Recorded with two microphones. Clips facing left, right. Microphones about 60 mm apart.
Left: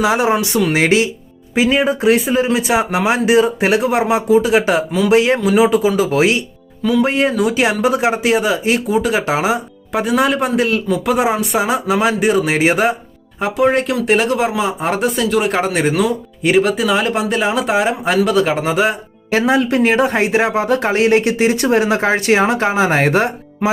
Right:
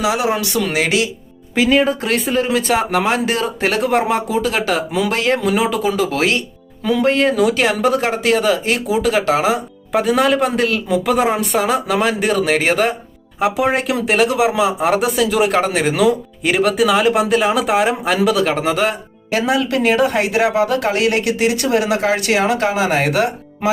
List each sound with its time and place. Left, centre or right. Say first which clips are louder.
0.0 s speech: left 3 dB; left
1.5 s speech: even; centre
4.5 s speech: left 5 dB; centre
4.9 s speech: left 2 dB; centre
5.1 s speech: left 6 dB; centre
9.9 s speech: right 1 dB; centre
13.4 s speech: left 2 dB; centre
19.3 s speech: left 3 dB; left